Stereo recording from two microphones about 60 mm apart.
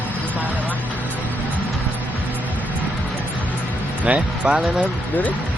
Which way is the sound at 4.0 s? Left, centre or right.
Right.